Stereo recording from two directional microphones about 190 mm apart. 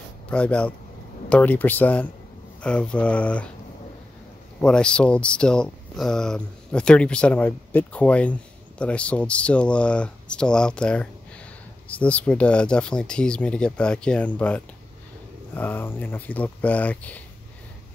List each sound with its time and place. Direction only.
0.3 s speech: 5° left (ahead or behind)
4.6 s speech: 5° left (ahead or behind)